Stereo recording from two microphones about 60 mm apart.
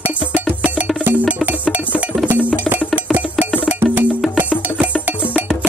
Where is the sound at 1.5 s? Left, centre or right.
Right.